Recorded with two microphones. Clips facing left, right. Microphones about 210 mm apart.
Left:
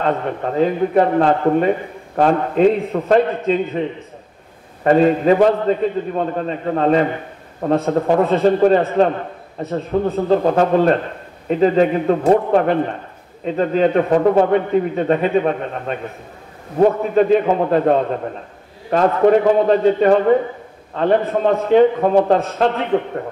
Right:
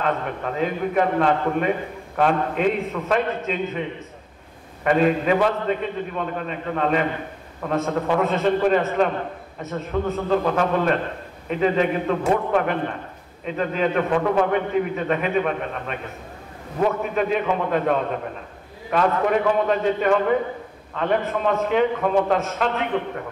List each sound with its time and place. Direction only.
0.0 s a man's voice: 35° left (ahead or behind)
4.8 s a man's voice: 35° left (ahead or behind)